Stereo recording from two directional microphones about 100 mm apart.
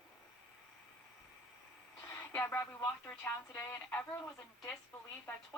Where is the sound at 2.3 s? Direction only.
25° left (ahead or behind).